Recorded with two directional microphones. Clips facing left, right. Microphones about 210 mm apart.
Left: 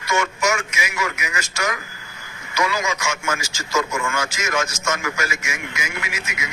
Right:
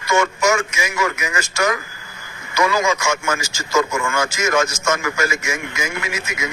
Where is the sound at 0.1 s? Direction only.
50° right (ahead or behind).